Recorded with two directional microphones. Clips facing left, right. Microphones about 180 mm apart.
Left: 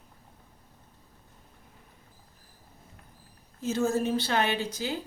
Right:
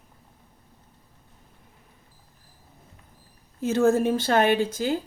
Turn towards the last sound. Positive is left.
turn(degrees=-50)  # may be behind; listen again after turning